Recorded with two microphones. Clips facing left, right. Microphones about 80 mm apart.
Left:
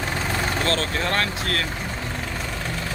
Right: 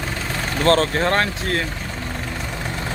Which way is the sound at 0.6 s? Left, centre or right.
Right.